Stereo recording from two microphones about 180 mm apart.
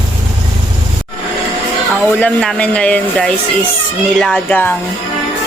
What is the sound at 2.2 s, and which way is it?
Speech, 5° left (ahead or behind).